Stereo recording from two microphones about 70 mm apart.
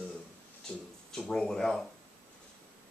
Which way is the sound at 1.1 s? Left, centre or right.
Centre.